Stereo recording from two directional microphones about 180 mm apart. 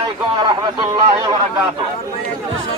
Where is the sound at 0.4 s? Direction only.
25° right (ahead or behind).